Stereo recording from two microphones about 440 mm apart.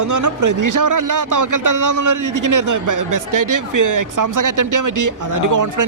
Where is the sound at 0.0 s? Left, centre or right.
Right.